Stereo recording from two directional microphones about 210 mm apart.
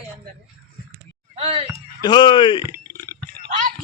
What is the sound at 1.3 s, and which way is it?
Speech, 30° right (ahead or behind).